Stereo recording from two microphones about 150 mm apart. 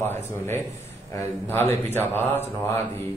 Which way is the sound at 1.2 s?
15° left (ahead or behind).